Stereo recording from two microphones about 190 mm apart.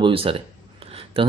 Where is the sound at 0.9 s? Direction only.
30° right (ahead or behind).